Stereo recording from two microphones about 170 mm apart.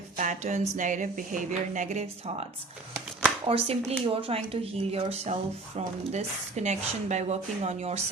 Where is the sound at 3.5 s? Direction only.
35° right (ahead or behind).